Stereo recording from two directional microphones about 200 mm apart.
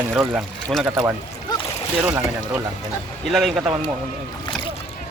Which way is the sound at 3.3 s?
Centre (ahead or behind).